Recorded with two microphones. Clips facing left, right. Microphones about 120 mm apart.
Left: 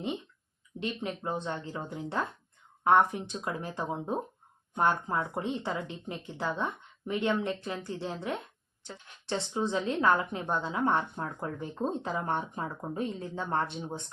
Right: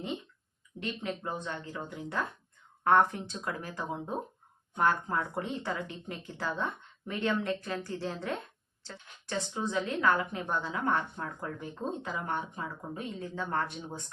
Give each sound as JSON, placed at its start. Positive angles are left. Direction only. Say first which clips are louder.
{"t": 0.8, "sound": "a woman's voice", "louder": "left 1 dB", "side_deg": 25}
{"t": 2.8, "sound": "speech", "louder": "left 1 dB", "side_deg": 15}
{"t": 3.6, "sound": "a woman's voice", "louder": "left 3 dB", "side_deg": 25}
{"t": 9.2, "sound": "a woman's voice", "louder": "left 3 dB", "side_deg": 25}